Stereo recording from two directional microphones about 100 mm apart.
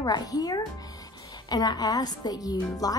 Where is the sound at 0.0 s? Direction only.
40° left (ahead or behind).